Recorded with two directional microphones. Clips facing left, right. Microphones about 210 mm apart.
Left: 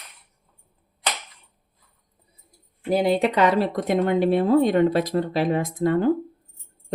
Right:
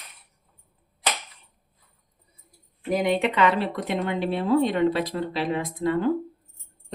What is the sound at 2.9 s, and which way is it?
Speech, 35° left (ahead or behind).